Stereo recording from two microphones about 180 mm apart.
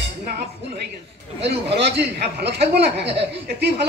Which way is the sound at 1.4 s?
70° right (ahead or behind).